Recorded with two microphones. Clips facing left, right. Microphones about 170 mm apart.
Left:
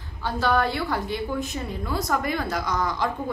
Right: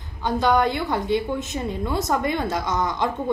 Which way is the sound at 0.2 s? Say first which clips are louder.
Right 3 dB; 20° right (ahead or behind).